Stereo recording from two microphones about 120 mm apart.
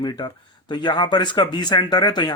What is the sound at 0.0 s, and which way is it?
Speech, 35° left (ahead or behind).